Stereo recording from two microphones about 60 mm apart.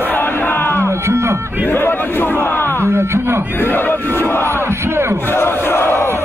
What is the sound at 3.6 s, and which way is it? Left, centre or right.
Battle cry, left.